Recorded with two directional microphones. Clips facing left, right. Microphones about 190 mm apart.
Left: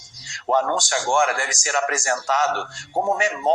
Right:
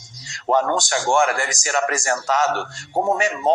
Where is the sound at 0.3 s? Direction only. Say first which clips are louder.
Right 2 dB; 40° right (ahead or behind).